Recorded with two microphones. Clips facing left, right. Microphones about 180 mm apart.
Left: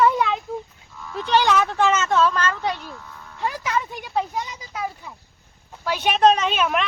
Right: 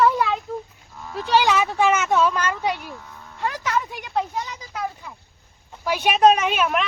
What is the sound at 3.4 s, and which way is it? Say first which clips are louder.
A woman's voice: even; 10° left (ahead or behind).